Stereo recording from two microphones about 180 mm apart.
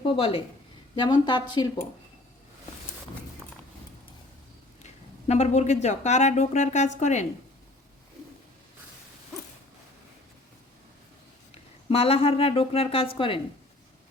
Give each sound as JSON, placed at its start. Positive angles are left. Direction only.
{"t": 0.0, "sound": "speech", "side_deg": 30}
{"t": 5.3, "sound": "speech", "side_deg": 40}
{"t": 11.5, "sound": "a woman's voice", "side_deg": 35}